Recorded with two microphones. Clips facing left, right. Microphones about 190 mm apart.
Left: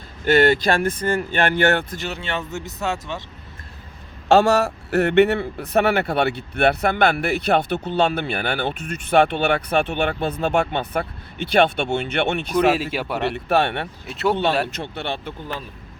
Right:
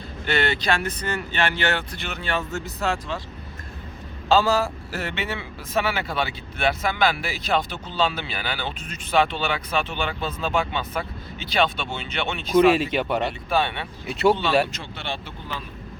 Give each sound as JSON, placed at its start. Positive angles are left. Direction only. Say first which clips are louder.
{"t": 0.3, "sound": "speech", "louder": "left 7 dB", "side_deg": 50}
{"t": 2.2, "sound": "speech", "louder": "even", "side_deg": 20}
{"t": 4.3, "sound": "a man's voice", "louder": "left 4 dB", "side_deg": 70}
{"t": 12.7, "sound": "speech", "louder": "right 1 dB", "side_deg": 5}
{"t": 13.3, "sound": "speech", "louder": "left 4 dB", "side_deg": 70}
{"t": 14.1, "sound": "speech", "louder": "right 3 dB", "side_deg": 0}
{"t": 14.8, "sound": "a man's voice", "louder": "left 5 dB", "side_deg": 60}